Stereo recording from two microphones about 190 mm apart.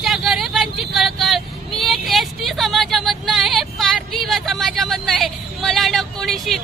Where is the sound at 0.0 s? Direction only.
Centre (ahead or behind).